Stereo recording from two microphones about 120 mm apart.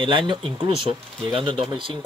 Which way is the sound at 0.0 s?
45° right (ahead or behind).